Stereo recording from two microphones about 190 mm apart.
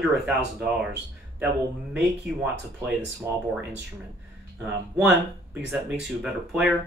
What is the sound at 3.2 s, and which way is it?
Speech, 15° right (ahead or behind).